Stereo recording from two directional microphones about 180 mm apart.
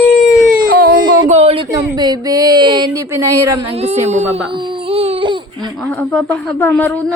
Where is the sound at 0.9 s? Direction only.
25° right (ahead or behind).